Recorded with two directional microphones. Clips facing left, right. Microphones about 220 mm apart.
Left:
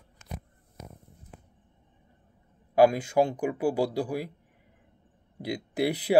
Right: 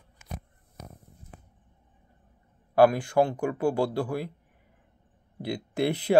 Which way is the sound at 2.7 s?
15° left (ahead or behind).